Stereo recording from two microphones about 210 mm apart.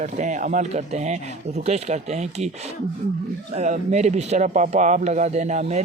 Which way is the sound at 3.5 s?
35° right (ahead or behind).